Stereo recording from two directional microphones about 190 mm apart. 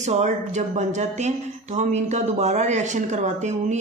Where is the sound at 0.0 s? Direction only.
40° right (ahead or behind).